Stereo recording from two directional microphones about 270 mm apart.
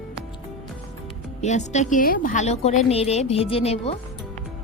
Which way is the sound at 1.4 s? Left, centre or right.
Left.